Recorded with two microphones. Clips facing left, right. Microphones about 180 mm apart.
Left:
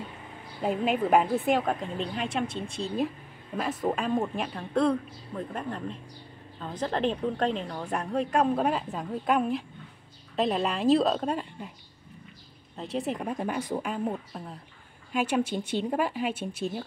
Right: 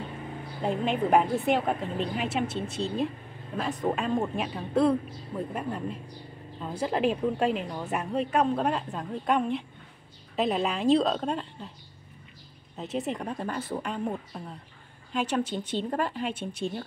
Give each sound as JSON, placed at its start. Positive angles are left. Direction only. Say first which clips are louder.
{"t": 0.6, "sound": "a woman's voice", "louder": "left 1 dB", "side_deg": 5}
{"t": 12.7, "sound": "a woman's voice", "louder": "even", "side_deg": 0}